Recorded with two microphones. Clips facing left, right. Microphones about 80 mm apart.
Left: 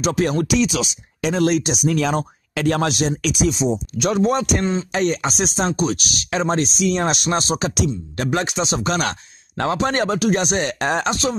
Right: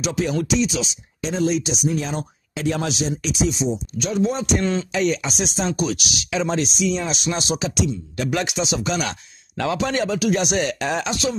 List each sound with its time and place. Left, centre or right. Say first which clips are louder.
0.0 s speech: left 3 dB; left
0.6 s speech: left 2 dB; left
1.9 s speech: left 5 dB; left
2.1 s speech: left 6 dB; left
4.9 s speech: left 1 dB; left
8.3 s speech: left 2 dB; left